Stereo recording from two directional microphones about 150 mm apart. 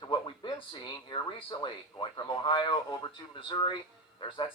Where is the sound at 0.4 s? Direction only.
30° left (ahead or behind).